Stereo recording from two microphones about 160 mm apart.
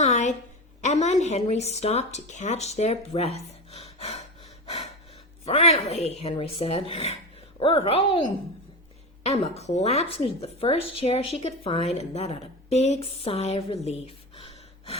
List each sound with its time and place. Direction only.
0.0 s a sound: 45° left (ahead or behind)
0.8 s speech: 45° left (ahead or behind)
4.6 s breathing: 40° left (ahead or behind)
5.5 s speech: 40° left (ahead or behind)
9.2 s speech: 40° left (ahead or behind)
13.8 s gasp: 40° left (ahead or behind)